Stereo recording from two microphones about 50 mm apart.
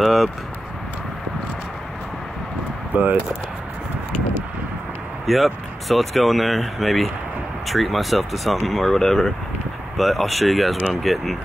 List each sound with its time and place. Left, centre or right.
0.0 s speech: centre
2.9 s speech: right
5.2 s speech: centre